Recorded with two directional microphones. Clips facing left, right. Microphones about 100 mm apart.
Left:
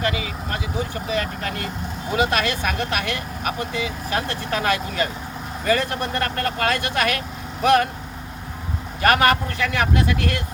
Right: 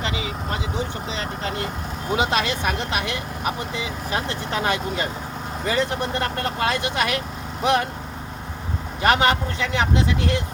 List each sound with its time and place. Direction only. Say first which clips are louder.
0.0 s vehicle: left 3 dB; 25° right (ahead or behind)
1.1 s speech: left 5 dB; 25° right (ahead or behind)
9.0 s speech: left 1 dB; 25° right (ahead or behind)